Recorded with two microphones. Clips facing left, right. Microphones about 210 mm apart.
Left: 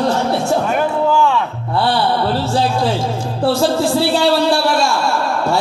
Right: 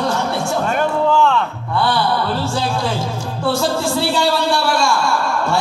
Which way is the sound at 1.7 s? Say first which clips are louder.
Left 2 dB; 35° left (ahead or behind).